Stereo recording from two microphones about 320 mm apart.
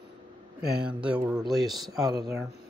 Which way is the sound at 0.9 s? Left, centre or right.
Centre.